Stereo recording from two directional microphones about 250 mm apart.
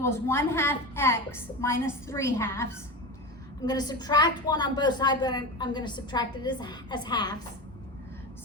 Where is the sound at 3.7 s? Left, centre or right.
Centre.